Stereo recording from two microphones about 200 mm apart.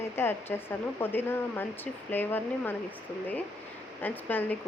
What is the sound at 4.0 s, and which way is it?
Speech, 10° left (ahead or behind).